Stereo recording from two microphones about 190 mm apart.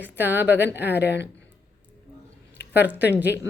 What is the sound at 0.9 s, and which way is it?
Speech, 65° left (ahead or behind).